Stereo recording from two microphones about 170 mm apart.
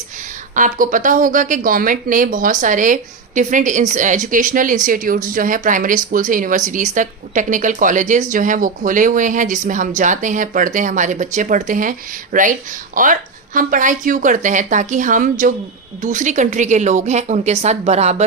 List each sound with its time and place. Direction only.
0.5 s speech: 50° right (ahead or behind)